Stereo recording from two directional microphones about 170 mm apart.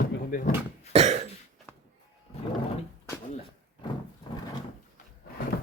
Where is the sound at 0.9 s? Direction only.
40° right (ahead or behind).